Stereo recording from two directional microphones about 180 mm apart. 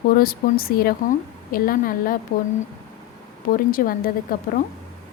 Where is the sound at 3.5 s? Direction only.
50° left (ahead or behind).